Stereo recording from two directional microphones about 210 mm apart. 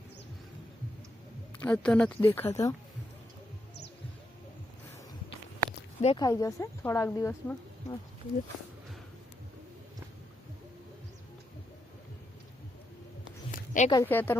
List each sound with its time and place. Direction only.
1.6 s speech: 5° left (ahead or behind)
6.0 s speech: 30° left (ahead or behind)
6.2 s speech: 15° left (ahead or behind)
13.5 s a sound: 35° left (ahead or behind)
13.9 s speech: 10° left (ahead or behind)